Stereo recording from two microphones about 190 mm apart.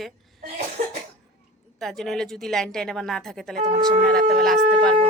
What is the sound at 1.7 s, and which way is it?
A woman's voice, centre (ahead or behind).